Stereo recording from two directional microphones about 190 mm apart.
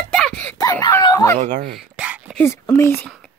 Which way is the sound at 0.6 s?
15° left (ahead or behind).